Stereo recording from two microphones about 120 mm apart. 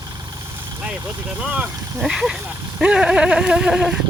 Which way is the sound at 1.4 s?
10° right (ahead or behind).